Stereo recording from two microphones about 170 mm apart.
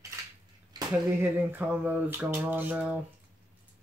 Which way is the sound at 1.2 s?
10° right (ahead or behind).